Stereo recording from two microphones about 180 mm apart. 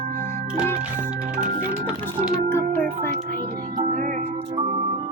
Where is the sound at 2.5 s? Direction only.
15° left (ahead or behind).